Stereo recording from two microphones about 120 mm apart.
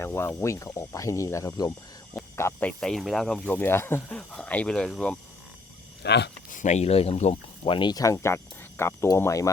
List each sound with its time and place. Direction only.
0.0 s speech: 20° left (ahead or behind)
2.3 s speech: 15° left (ahead or behind)
6.5 s speech: 90° left; by 9.5 s 25° left (ahead or behind)